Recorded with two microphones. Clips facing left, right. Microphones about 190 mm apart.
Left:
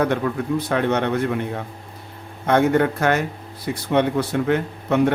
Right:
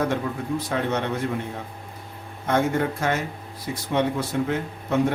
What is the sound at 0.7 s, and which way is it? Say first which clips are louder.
Speech: left 5 dB; 65° left (ahead or behind).